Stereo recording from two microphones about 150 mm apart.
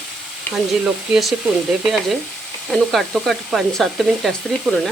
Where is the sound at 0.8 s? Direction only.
5° right (ahead or behind).